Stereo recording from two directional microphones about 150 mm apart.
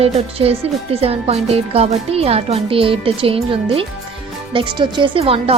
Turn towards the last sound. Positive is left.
turn(degrees=-40)  # may be behind; listen again after turning